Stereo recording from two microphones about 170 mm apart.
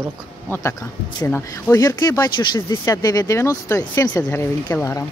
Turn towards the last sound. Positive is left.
turn(degrees=15)  # may be behind; listen again after turning